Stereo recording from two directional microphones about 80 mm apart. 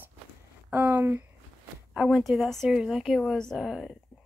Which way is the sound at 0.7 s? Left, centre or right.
Right.